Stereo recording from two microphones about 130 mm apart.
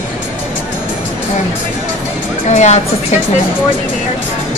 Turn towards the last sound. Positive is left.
turn(degrees=65)  # may be behind; listen again after turning